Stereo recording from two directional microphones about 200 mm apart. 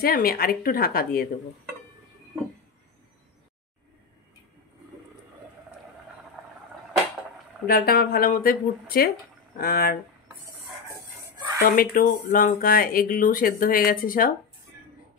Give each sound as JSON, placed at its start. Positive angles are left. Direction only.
{"t": 0.0, "sound": "speech", "side_deg": 45}
{"t": 7.6, "sound": "speech", "side_deg": 50}
{"t": 11.6, "sound": "speech", "side_deg": 45}